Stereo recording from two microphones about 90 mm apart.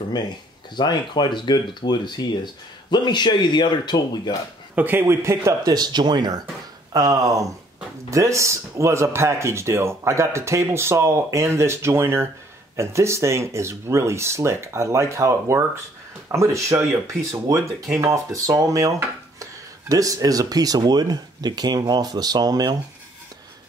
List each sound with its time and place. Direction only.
0.7 s speech: 55° left (ahead or behind)
4.7 s speech: 20° right (ahead or behind)
5.0 s speech: 35° right (ahead or behind)
5.7 s speech: 50° right (ahead or behind)
6.9 s speech: 40° right (ahead or behind)